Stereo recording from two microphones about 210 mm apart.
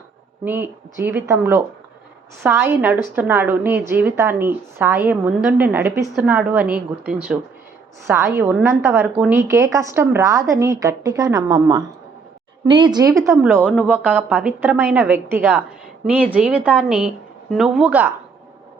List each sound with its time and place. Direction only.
0.4 s a woman's voice: 10° right (ahead or behind)